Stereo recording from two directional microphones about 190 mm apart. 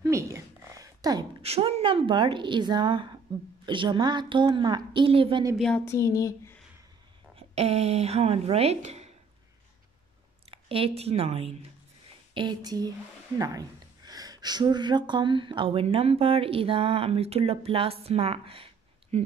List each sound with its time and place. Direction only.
0.0 s a sound: 15° right (ahead or behind)
1.4 s speech: 35° right (ahead or behind)
5.6 s speech: 5° left (ahead or behind)
5.9 s a sound: 15° left (ahead or behind)
7.3 s speech: 35° right (ahead or behind)
10.5 s speech: 30° right (ahead or behind)
12.4 s speech: 20° right (ahead or behind)